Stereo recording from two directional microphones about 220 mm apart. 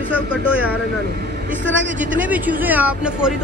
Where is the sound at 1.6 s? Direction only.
55° right (ahead or behind).